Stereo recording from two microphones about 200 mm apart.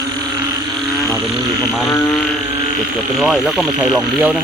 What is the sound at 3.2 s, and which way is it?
Speech, centre (ahead or behind).